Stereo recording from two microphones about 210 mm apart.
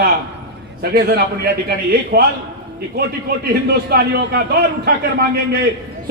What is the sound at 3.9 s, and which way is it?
A man's voice, 50° right (ahead or behind).